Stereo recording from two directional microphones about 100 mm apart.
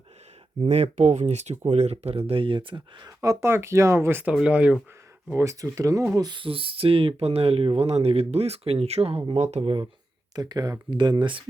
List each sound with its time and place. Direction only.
0.6 s speech: 90° right; by 3.1 s 55° right (ahead or behind)
3.2 s speech: 30° right (ahead or behind)
4.3 s speech: 10° right (ahead or behind)
5.3 s speech: 30° right (ahead or behind)
6.2 s speech: 55° right (ahead or behind); by 9.2 s 90° right
9.6 s speech: 80° right
10.3 s speech: 40° right (ahead or behind)